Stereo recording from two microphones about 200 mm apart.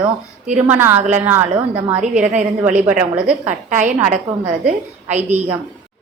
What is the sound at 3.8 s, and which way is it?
Speech, 40° right (ahead or behind).